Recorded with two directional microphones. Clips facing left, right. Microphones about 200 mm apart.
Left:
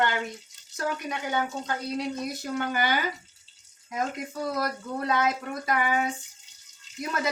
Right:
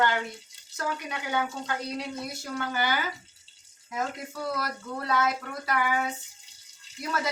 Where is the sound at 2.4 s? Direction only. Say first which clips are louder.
Left 2 dB; 20° left (ahead or behind).